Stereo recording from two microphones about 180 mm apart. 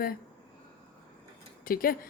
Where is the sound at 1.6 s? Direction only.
55° left (ahead or behind).